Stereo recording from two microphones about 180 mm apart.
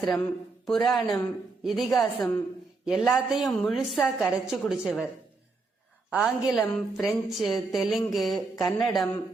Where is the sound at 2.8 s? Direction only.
Centre (ahead or behind).